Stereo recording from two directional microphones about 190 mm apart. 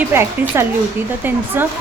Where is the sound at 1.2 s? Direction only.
10° right (ahead or behind).